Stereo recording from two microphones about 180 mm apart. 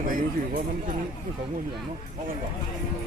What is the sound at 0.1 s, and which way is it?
Speech, 50° right (ahead or behind).